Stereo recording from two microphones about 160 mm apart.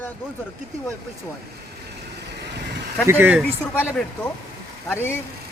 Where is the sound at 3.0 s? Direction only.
10° right (ahead or behind).